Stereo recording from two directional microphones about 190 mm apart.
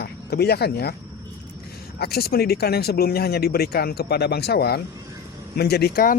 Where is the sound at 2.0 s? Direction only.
55° left (ahead or behind).